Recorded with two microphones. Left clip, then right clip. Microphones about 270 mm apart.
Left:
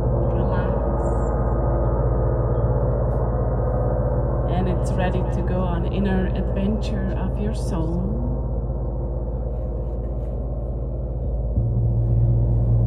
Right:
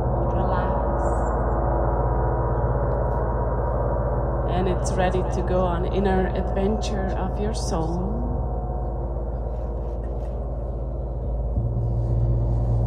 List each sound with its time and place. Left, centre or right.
0.3 s gong: centre
4.5 s speech: centre